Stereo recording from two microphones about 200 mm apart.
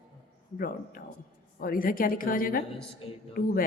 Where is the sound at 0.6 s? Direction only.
50° left (ahead or behind).